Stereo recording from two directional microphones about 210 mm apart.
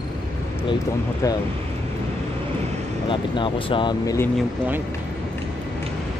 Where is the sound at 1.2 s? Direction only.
15° left (ahead or behind).